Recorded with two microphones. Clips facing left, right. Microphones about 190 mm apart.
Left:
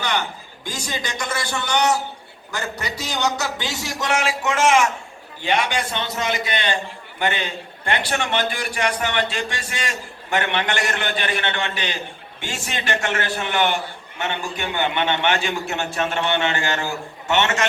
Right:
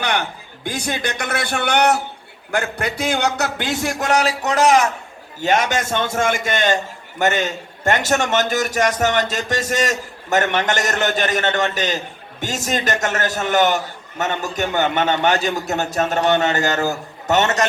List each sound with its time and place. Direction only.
0.0 s a man's voice: 60° right (ahead or behind)
4.1 s a man's voice: 40° right (ahead or behind)